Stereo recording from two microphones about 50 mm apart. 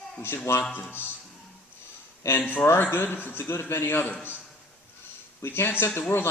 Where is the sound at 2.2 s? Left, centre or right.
Left.